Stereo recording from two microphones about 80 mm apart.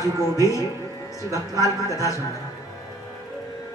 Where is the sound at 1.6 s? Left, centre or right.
Left.